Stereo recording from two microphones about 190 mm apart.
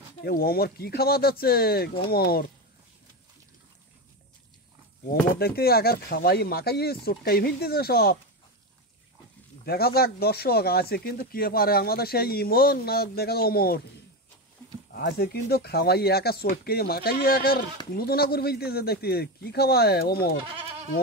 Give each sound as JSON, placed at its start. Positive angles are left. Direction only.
{"t": 0.2, "sound": "speech", "side_deg": 55}
{"t": 5.4, "sound": "speech", "side_deg": 55}
{"t": 9.7, "sound": "speech", "side_deg": 55}
{"t": 15.0, "sound": "speech", "side_deg": 60}